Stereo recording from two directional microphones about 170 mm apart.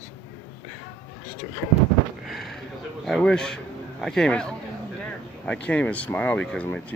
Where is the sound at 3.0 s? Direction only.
5° left (ahead or behind).